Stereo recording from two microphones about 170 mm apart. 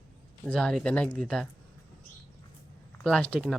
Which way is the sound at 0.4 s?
5° left (ahead or behind).